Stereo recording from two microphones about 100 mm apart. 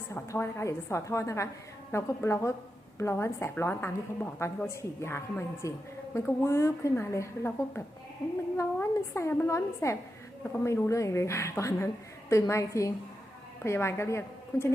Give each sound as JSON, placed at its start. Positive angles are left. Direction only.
{"t": 0.1, "sound": "a woman's voice", "side_deg": 25}